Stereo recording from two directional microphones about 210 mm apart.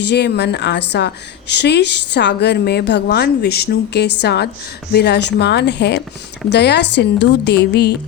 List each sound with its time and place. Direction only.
0.0 s speech: 55° left (ahead or behind)